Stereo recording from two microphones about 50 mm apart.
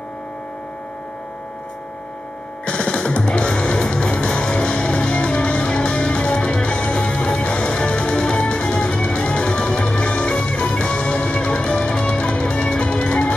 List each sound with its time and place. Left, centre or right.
2.6 s music: centre